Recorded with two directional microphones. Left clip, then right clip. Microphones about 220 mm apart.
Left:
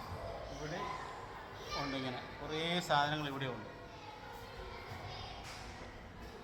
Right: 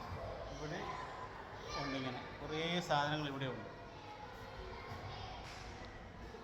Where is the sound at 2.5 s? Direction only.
15° left (ahead or behind).